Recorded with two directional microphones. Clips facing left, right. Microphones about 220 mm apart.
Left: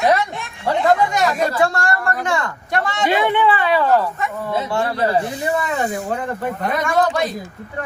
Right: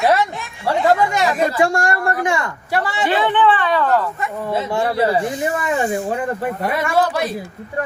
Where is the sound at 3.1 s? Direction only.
15° left (ahead or behind).